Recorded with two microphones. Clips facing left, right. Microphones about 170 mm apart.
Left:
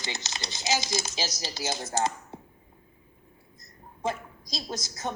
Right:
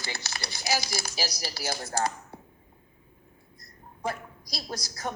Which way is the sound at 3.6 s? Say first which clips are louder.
Left 2 dB; 20° left (ahead or behind).